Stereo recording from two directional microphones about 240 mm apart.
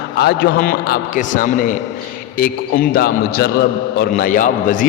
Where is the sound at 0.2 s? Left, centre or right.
Left.